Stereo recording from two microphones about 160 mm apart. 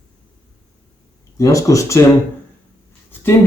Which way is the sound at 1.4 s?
20° left (ahead or behind).